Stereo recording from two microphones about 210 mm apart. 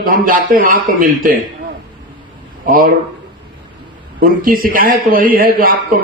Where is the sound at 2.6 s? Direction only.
40° right (ahead or behind).